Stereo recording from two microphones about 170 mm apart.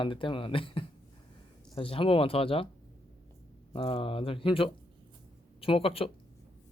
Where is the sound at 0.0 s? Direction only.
30° left (ahead or behind).